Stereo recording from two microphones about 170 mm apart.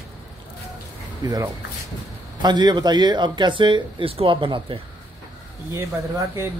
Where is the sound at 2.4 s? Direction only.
25° right (ahead or behind).